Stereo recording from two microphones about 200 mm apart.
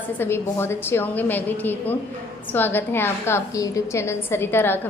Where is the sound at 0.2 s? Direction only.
10° left (ahead or behind).